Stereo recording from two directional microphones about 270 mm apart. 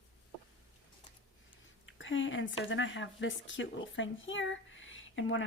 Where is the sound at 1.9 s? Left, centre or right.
Left.